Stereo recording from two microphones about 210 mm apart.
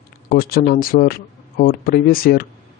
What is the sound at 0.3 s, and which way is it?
Speech, 45° left (ahead or behind).